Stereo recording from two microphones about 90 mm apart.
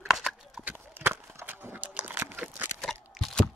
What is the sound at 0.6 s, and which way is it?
Horse, 25° right (ahead or behind).